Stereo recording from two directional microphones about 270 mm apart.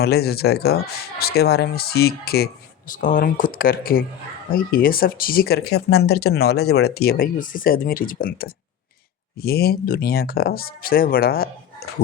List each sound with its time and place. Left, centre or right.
0.0 s speech: left